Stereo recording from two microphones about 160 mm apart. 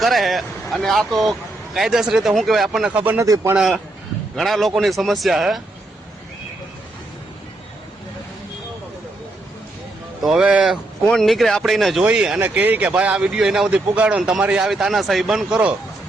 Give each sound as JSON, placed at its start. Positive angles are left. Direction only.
{"t": 0.0, "sound": "speech", "side_deg": 0}
{"t": 3.2, "sound": "speech", "side_deg": -20}
{"t": 3.5, "sound": "speech", "side_deg": -5}
{"t": 10.2, "sound": "speech", "side_deg": -5}